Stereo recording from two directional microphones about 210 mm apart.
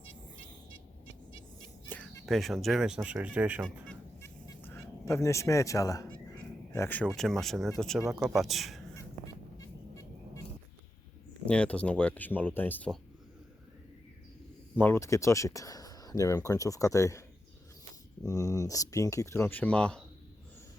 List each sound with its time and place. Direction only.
1.9 s speech: 5° left (ahead or behind)
3.8 s fowl: 10° left (ahead or behind)
6.7 s speech: 10° left (ahead or behind)
9.6 s vehicle: 15° left (ahead or behind)
11.4 s speech: 5° left (ahead or behind)
14.8 s speech: 10° left (ahead or behind)